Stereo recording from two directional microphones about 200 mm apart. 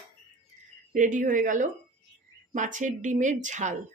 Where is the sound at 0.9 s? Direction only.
40° right (ahead or behind).